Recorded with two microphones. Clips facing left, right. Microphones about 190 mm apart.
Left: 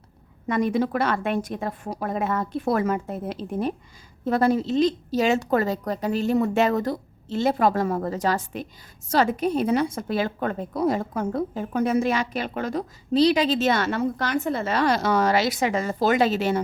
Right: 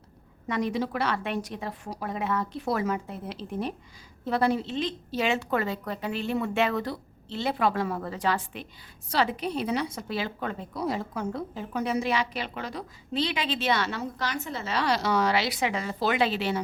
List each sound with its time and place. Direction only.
0.4 s a woman's voice: 50° left (ahead or behind)